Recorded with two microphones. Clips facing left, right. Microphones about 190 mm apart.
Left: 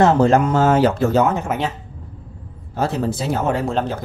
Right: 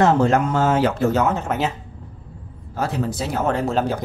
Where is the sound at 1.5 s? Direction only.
5° left (ahead or behind).